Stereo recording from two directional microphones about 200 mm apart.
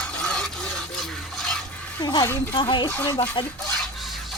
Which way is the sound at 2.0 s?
20° left (ahead or behind).